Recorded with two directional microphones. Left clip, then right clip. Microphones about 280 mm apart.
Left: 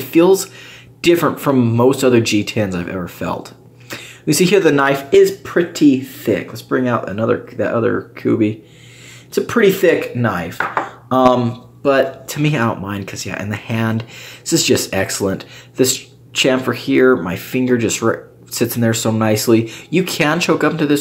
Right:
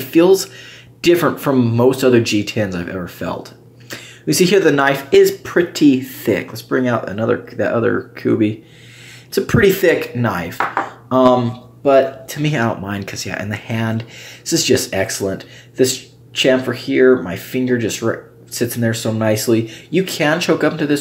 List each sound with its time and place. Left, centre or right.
0.0 s speech: centre